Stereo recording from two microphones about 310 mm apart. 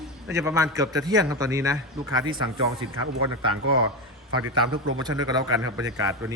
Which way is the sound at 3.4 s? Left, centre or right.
Right.